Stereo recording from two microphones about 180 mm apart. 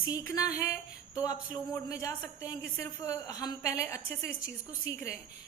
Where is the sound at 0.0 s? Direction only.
15° left (ahead or behind).